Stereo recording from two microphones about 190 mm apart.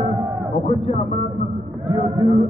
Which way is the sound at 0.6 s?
30° left (ahead or behind).